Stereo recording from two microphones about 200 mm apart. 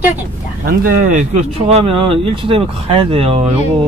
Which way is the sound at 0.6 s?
45° right (ahead or behind).